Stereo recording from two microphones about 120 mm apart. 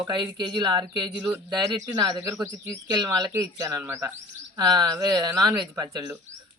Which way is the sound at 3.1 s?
35° right (ahead or behind).